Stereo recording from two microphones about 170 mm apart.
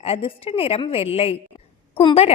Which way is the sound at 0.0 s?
35° left (ahead or behind).